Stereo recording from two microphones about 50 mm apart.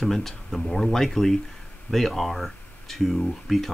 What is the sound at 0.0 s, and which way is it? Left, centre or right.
Speech, centre.